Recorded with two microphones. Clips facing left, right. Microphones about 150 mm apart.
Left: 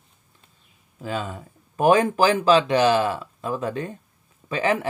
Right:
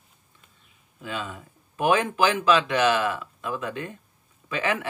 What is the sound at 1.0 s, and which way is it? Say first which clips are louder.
Speech: left 4 dB; 40° left (ahead or behind).